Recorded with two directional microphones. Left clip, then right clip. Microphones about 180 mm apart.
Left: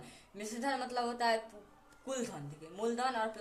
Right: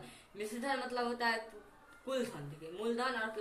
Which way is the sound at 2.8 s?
65° left (ahead or behind).